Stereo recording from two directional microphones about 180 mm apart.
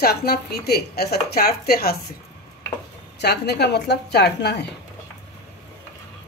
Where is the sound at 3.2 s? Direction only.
65° left (ahead or behind).